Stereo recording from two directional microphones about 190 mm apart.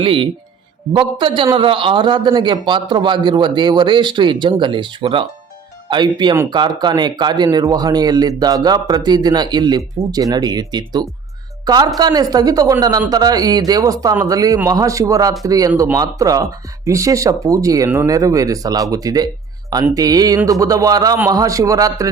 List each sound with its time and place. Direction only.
0.0 s speech: 30° right (ahead or behind)